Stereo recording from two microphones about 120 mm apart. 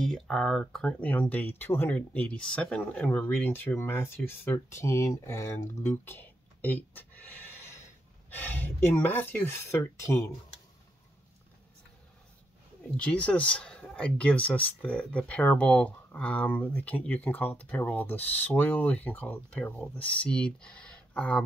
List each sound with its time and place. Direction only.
0.0 s speech: 5° left (ahead or behind); by 10.2 s 20° left (ahead or behind)
12.9 s speech: 10° left (ahead or behind)